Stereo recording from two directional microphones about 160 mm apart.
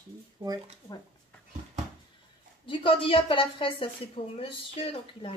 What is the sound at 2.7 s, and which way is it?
A woman's voice, 35° left (ahead or behind).